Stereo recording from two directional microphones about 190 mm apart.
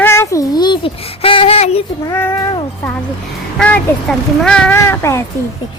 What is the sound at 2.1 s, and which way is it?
Speech, 10° left (ahead or behind).